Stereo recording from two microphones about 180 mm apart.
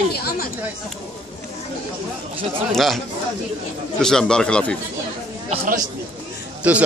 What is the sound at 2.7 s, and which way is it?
Speech, centre (ahead or behind).